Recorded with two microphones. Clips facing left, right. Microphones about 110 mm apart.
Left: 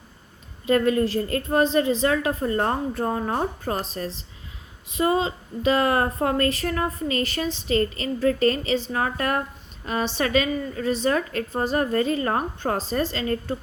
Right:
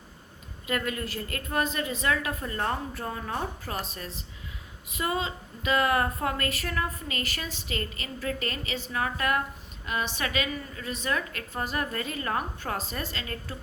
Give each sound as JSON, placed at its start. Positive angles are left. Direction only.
{"t": 0.7, "sound": "a woman's voice", "side_deg": 30}